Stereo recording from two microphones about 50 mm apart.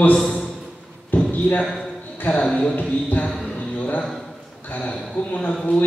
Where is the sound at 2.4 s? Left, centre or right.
Centre.